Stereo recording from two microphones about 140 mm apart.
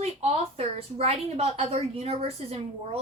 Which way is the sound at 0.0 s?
45° right (ahead or behind).